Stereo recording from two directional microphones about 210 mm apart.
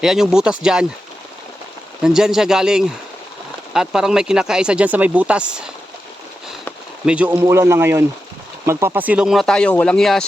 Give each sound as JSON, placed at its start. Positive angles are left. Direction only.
{"t": 0.0, "sound": "speech", "side_deg": 0}
{"t": 2.0, "sound": "speech", "side_deg": -5}
{"t": 7.0, "sound": "speech", "side_deg": -5}